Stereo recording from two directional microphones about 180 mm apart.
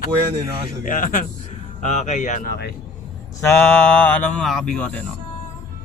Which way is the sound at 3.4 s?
10° left (ahead or behind).